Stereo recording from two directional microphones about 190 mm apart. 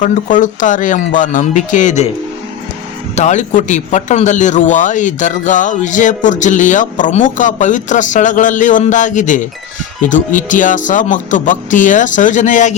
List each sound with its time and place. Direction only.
0.0 s a man's voice: 40° left (ahead or behind)
3.2 s a man's voice: 40° left (ahead or behind)